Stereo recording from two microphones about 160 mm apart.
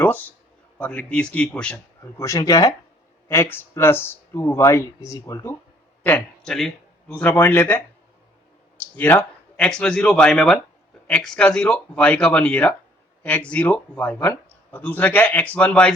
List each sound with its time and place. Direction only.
0.0 s a sound: 10° left (ahead or behind)
0.8 s speech: 10° left (ahead or behind)
9.0 s speech: 10° left (ahead or behind)